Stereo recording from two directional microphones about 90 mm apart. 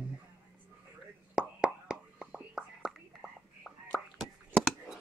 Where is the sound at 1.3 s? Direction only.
10° right (ahead or behind).